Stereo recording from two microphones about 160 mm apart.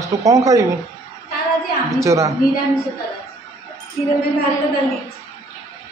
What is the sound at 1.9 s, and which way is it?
Speech, 20° right (ahead or behind).